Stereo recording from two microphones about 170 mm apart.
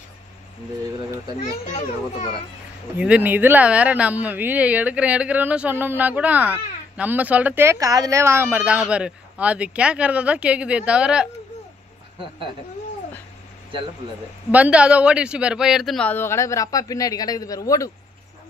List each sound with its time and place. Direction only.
1.4 s a child's voice: 45° left (ahead or behind)
3.0 s speech: 10° right (ahead or behind)
14.5 s a man's voice: 5° right (ahead or behind); by 17.9 s 20° left (ahead or behind)